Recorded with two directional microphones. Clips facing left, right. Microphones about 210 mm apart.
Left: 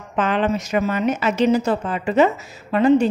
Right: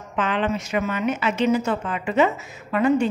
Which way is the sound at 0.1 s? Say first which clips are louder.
Left 3 dB; 40° left (ahead or behind).